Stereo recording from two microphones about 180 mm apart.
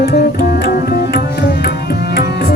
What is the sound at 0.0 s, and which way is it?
Music, 60° left (ahead or behind).